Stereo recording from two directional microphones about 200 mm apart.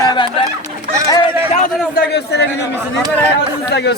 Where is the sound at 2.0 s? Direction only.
55° left (ahead or behind).